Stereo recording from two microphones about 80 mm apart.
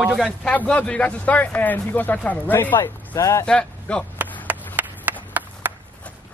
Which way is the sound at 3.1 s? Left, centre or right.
Left.